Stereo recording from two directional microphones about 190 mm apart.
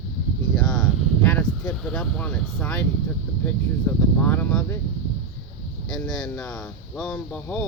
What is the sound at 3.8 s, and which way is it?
Speech, 10° left (ahead or behind).